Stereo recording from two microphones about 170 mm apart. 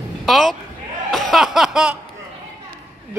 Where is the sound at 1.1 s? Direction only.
Centre (ahead or behind).